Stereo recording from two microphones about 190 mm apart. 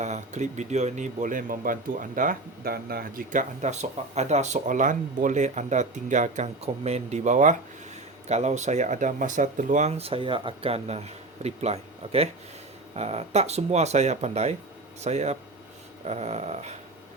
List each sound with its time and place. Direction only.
0.0 s speech: 40° right (ahead or behind)